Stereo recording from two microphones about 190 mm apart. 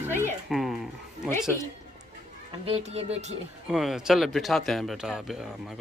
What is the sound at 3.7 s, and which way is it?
Speech, 5° right (ahead or behind).